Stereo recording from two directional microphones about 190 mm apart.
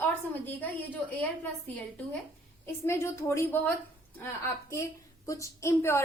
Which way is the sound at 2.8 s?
15° left (ahead or behind).